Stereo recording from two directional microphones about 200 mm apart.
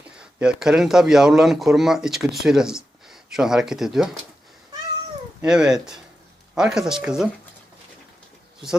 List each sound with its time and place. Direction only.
0.2 s speech: 5° right (ahead or behind)
5.4 s speech: 5° right (ahead or behind)